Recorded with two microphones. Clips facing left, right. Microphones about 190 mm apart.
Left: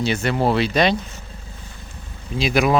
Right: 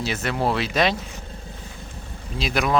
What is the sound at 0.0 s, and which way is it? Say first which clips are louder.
Speech: left 4 dB; centre (ahead or behind).